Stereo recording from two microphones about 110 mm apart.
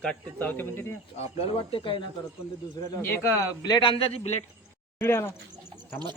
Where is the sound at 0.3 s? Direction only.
15° left (ahead or behind).